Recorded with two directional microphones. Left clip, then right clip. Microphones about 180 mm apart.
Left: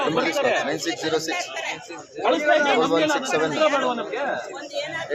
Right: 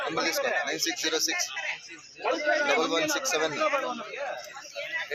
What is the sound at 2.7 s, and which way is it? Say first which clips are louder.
Speech: left 6 dB; 15° right (ahead or behind).